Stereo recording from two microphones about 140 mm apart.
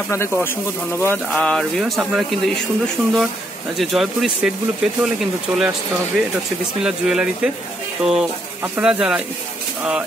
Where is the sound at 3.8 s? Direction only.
Centre (ahead or behind).